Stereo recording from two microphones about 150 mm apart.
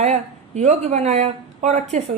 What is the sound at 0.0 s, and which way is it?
Speech, 50° right (ahead or behind).